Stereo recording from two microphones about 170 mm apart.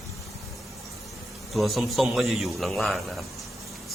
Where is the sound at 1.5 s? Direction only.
Centre (ahead or behind).